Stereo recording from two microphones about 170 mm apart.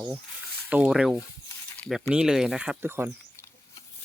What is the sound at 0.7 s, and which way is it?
Speech, 5° right (ahead or behind).